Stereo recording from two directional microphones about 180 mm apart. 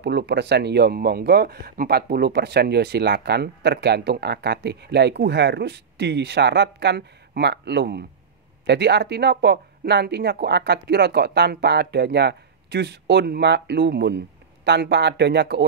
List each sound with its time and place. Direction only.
0.0 s speech: 70° right (ahead or behind)